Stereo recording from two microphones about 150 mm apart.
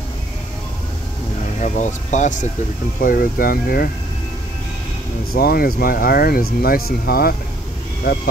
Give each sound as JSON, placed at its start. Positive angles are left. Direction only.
{"t": 1.6, "sound": "speech", "side_deg": 55}
{"t": 3.0, "sound": "speech", "side_deg": 70}
{"t": 5.3, "sound": "speech", "side_deg": 85}